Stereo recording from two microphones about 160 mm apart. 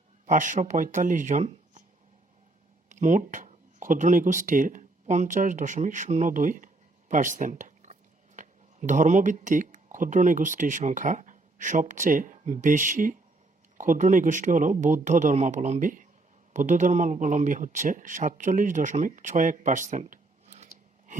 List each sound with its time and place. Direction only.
0.3 s speech: 55° right (ahead or behind)
2.9 s speech: 50° right (ahead or behind)